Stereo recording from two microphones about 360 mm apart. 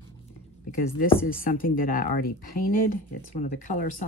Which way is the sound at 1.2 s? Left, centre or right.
Left.